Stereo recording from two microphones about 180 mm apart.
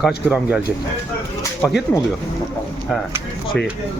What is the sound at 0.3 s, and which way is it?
Speech, 5° right (ahead or behind).